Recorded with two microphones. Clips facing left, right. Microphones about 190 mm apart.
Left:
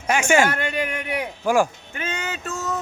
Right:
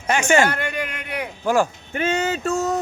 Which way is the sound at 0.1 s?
10° left (ahead or behind).